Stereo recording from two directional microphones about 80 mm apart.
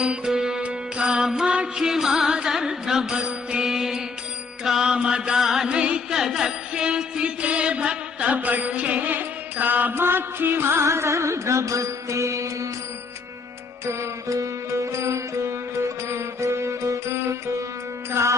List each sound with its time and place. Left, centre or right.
0.0 s music: centre; by 12.6 s right
13.8 s music: right